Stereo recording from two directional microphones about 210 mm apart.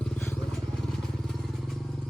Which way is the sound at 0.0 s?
5° left (ahead or behind).